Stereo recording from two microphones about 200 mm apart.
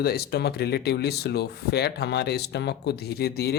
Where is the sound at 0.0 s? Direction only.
50° left (ahead or behind).